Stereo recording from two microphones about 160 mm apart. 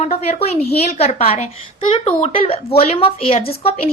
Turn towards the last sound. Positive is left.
turn(degrees=40)  # may be behind; listen again after turning